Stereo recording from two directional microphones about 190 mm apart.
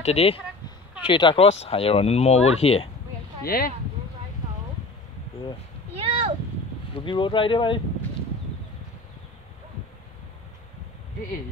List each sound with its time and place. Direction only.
0.0 s speech: 30° left (ahead or behind)
3.4 s speech: 50° left (ahead or behind)
5.9 s a sound: 30° right (ahead or behind)
7.1 s speech: 25° left (ahead or behind)